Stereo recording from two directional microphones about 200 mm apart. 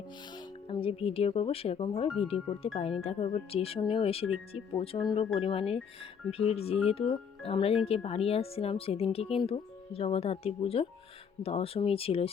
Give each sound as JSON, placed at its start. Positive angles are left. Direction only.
{"t": 0.3, "sound": "speech", "side_deg": 25}